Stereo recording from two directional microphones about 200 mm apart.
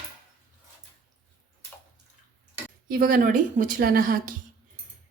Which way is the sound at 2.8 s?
45° right (ahead or behind).